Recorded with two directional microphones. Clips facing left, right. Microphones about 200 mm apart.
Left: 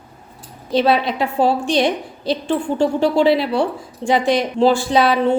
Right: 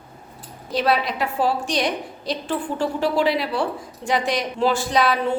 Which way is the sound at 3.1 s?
30° left (ahead or behind).